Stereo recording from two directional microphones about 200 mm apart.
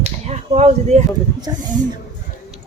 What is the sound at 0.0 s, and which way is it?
Speech, 35° right (ahead or behind).